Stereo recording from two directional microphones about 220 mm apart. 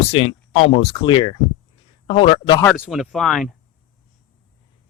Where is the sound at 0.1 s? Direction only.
25° left (ahead or behind).